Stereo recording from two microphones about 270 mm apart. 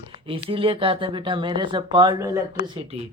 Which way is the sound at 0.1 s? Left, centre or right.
Centre.